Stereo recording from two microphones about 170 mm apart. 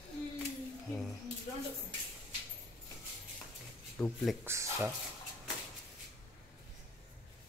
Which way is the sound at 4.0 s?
5° left (ahead or behind).